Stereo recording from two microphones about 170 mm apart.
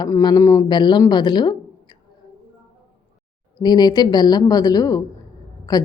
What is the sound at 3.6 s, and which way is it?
A woman's voice, 25° left (ahead or behind).